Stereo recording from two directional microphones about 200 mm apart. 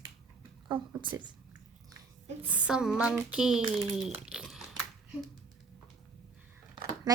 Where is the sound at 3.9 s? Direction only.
5° right (ahead or behind).